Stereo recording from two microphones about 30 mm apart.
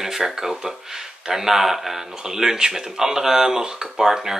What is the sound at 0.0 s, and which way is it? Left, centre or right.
Speech, centre.